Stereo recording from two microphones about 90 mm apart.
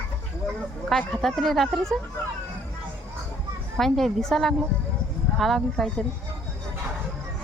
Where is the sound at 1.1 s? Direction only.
5° left (ahead or behind).